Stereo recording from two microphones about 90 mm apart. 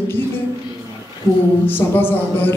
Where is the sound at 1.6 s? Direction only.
25° left (ahead or behind).